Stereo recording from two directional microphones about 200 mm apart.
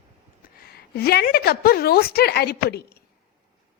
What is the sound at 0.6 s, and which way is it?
Speech, 50° left (ahead or behind).